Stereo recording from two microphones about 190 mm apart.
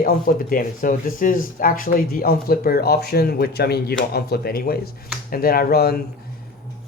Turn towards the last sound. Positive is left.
turn(degrees=55)  # may be behind; listen again after turning